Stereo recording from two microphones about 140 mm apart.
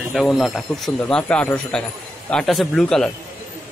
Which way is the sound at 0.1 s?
Centre (ahead or behind).